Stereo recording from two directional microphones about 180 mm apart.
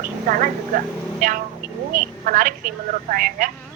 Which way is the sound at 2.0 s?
50° right (ahead or behind).